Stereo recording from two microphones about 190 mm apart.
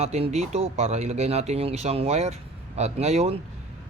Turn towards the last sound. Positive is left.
turn(degrees=-35)  # may be behind; listen again after turning